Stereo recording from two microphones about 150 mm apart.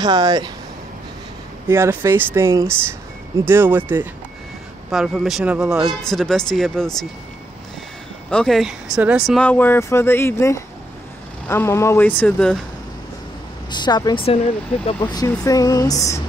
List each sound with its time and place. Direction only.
0.0 s speech: 25° right (ahead or behind)
1.7 s speech: 15° right (ahead or behind)
4.9 s speech: centre (ahead or behind)
8.3 s speech: 5° left (ahead or behind)
9.4 s speech: 10° left (ahead or behind)
13.7 s speech: 30° left (ahead or behind)